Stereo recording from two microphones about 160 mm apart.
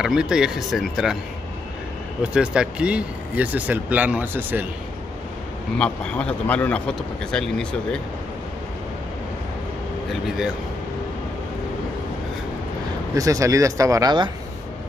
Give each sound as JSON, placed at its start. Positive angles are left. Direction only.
{"t": 0.0, "sound": "speech", "side_deg": -5}
{"t": 2.3, "sound": "speech", "side_deg": -5}
{"t": 5.8, "sound": "speech", "side_deg": 10}
{"t": 13.1, "sound": "speech", "side_deg": -20}